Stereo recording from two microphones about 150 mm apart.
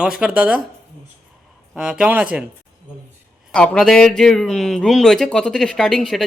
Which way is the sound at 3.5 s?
5° left (ahead or behind).